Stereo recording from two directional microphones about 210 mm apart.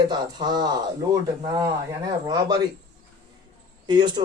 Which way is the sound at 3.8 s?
20° right (ahead or behind).